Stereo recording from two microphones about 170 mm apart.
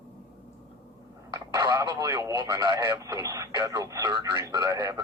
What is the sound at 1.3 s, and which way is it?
Speech, 20° right (ahead or behind).